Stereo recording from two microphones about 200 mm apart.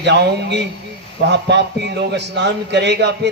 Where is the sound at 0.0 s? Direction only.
60° right (ahead or behind).